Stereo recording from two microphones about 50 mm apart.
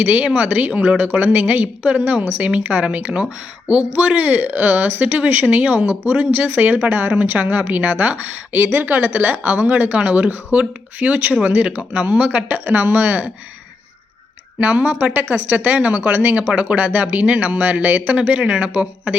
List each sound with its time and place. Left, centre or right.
0.0 s speech: right
2.0 s a woman's voice: centre
2.4 s speech: right
9.0 s speech: right
12.6 s speech: right
14.6 s speech: right
18.2 s speech: right